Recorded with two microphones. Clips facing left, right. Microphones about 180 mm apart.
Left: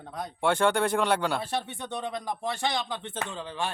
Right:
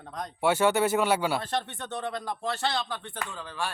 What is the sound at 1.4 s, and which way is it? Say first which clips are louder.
Speech: even; 10° left (ahead or behind).